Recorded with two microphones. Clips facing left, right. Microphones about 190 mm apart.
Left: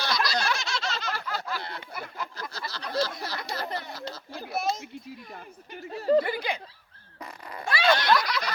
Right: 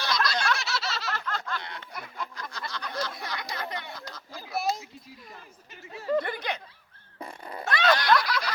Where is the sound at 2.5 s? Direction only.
35° left (ahead or behind).